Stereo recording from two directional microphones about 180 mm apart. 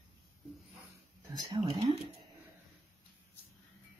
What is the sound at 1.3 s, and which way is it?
Speech, 25° right (ahead or behind).